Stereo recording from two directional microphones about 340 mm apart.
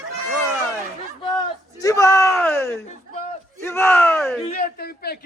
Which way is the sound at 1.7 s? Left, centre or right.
Centre.